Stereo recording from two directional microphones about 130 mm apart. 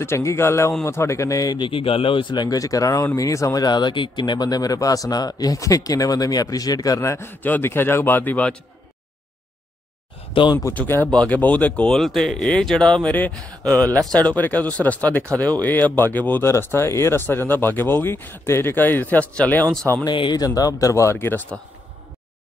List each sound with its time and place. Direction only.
0.0 s speech: 20° left (ahead or behind)
1.7 s speech: 45° left (ahead or behind); by 8.5 s 10° left (ahead or behind)
10.3 s speech: 40° left (ahead or behind)
10.6 s speech: 15° left (ahead or behind)
20.1 s speech: 35° left (ahead or behind); by 21.5 s 15° left (ahead or behind)